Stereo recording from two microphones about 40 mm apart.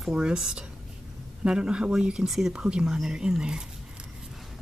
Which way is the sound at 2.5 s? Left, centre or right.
Right.